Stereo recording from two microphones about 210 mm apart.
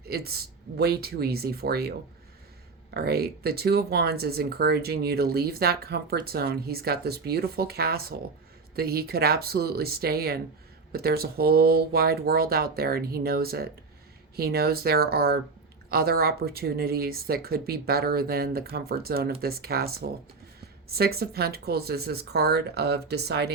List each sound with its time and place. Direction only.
0.1 s speech: 50° right (ahead or behind)